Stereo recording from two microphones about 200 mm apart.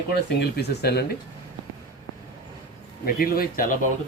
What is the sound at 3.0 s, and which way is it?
Speech, 45° left (ahead or behind).